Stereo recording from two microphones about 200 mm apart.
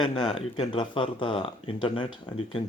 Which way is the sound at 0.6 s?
25° left (ahead or behind).